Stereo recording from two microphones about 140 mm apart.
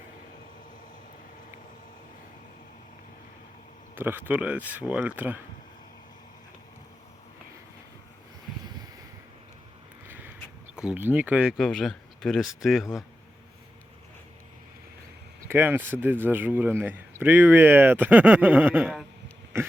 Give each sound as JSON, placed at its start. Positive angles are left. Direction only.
{"t": 3.9, "sound": "speech", "side_deg": -15}
{"t": 10.8, "sound": "speech", "side_deg": -10}
{"t": 15.4, "sound": "speech", "side_deg": -15}
{"t": 19.5, "sound": "a sound", "side_deg": -20}